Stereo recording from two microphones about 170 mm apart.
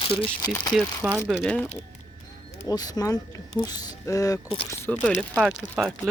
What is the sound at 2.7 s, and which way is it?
Speech, 20° left (ahead or behind).